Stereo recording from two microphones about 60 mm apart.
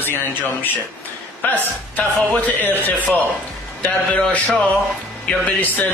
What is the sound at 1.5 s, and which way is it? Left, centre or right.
Speech, left.